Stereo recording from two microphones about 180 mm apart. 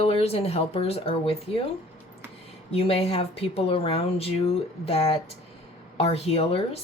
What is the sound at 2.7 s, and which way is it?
Speech, 35° left (ahead or behind).